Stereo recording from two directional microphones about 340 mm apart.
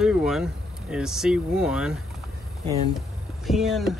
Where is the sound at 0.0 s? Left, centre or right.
Centre.